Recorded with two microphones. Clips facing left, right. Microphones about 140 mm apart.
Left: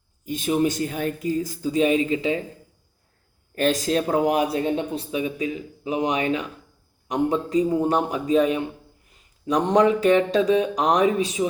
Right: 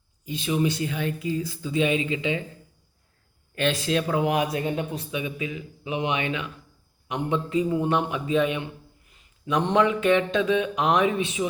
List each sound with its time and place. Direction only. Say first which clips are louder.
0.3 s speech: left 3 dB; 45° left (ahead or behind)
3.5 s speech: left 3 dB; 40° left (ahead or behind)